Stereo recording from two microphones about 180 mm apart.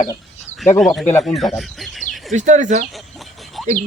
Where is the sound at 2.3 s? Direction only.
45° right (ahead or behind).